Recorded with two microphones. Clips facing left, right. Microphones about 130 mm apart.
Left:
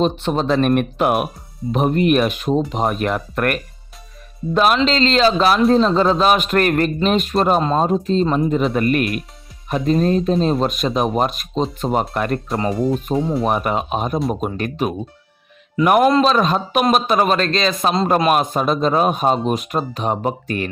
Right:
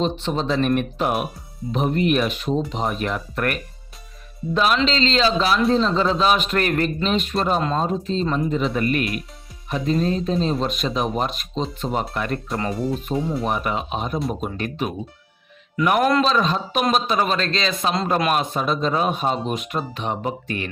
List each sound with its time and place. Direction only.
0.0 s speech: 55° left (ahead or behind)
1.7 s speech: 50° left (ahead or behind)
13.1 s speech: 25° left (ahead or behind)
13.4 s speech: 50° left (ahead or behind)